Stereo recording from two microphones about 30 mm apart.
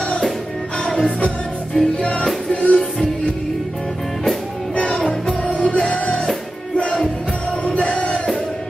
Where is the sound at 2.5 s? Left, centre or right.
Left.